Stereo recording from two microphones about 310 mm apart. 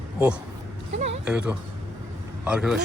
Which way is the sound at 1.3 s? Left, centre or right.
Centre.